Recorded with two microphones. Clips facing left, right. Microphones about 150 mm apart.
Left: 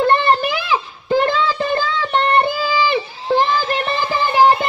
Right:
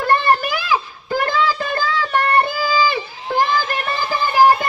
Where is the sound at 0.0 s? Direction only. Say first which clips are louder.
Left 2 dB; 20° left (ahead or behind).